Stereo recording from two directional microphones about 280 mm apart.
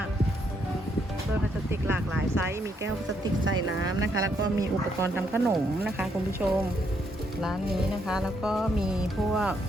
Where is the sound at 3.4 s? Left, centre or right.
Right.